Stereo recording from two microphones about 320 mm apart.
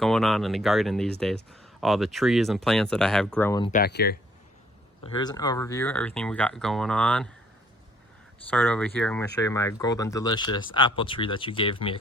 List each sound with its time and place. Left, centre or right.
0.0 s speech: centre
3.7 s speech: left
5.1 s speech: centre
8.4 s speech: centre